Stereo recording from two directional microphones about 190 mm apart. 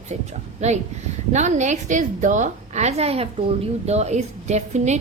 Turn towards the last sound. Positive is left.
turn(degrees=-35)  # may be behind; listen again after turning